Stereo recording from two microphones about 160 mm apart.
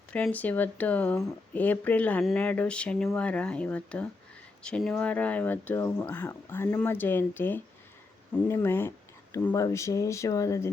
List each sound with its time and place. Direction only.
0.1 s speech: 10° left (ahead or behind)